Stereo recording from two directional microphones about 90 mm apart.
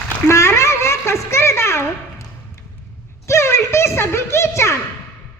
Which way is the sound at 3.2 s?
30° left (ahead or behind).